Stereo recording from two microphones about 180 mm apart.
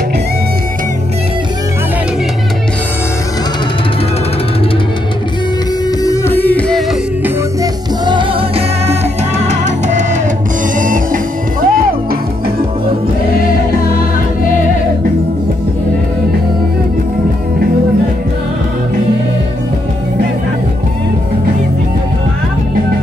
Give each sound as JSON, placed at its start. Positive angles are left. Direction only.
{"t": 5.9, "sound": "music", "side_deg": 15}
{"t": 8.0, "sound": "music", "side_deg": -25}